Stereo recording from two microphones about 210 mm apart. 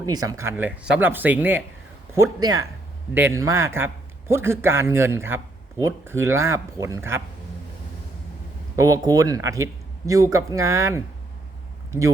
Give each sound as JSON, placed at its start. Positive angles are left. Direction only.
{"t": 0.0, "sound": "speech", "side_deg": -15}
{"t": 8.7, "sound": "speech", "side_deg": -15}